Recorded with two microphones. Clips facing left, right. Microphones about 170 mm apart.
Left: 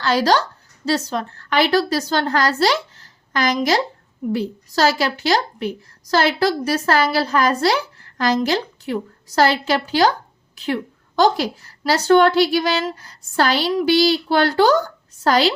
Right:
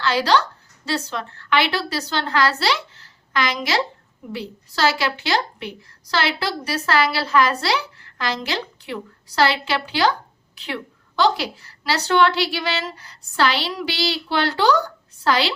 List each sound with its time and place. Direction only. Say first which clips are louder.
0.0 s a woman's voice: left 2 dB; 40° left (ahead or behind)